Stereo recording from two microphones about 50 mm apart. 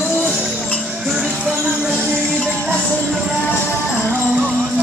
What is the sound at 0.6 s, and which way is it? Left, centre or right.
Music, left.